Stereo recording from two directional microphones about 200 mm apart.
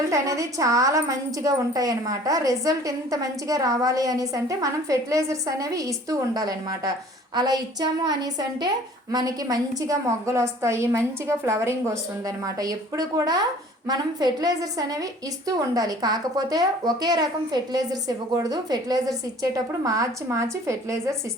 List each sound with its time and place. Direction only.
0.1 s a woman's voice: 15° right (ahead or behind)